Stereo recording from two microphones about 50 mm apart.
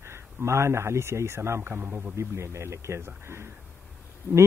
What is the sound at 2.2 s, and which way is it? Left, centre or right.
Speech, right.